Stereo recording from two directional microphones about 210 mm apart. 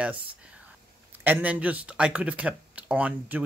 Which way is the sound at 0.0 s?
5° right (ahead or behind).